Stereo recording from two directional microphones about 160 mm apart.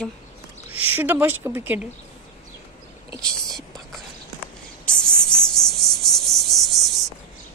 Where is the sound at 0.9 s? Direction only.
10° right (ahead or behind).